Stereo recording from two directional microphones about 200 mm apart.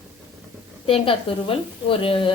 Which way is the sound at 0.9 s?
25° left (ahead or behind).